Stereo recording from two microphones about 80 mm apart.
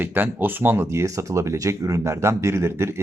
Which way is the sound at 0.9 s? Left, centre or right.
Right.